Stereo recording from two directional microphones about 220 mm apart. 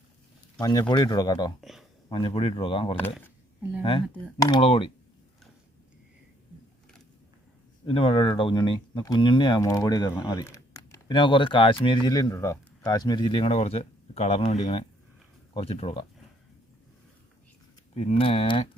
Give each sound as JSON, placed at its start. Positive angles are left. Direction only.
{"t": 0.6, "sound": "speech", "side_deg": 20}
{"t": 4.4, "sound": "speech", "side_deg": 20}
{"t": 7.9, "sound": "speech", "side_deg": 25}
{"t": 17.9, "sound": "speech", "side_deg": 30}